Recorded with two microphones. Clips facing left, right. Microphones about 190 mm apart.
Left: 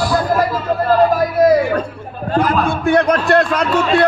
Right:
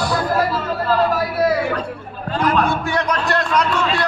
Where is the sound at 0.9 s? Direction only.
45° left (ahead or behind).